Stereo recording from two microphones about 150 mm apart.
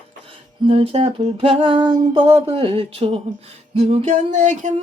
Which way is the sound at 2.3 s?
45° right (ahead or behind).